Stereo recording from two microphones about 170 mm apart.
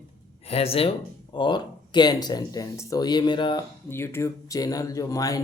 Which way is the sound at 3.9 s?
15° left (ahead or behind).